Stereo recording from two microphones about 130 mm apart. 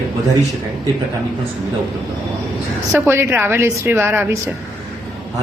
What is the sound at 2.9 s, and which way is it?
A woman's voice, 20° right (ahead or behind).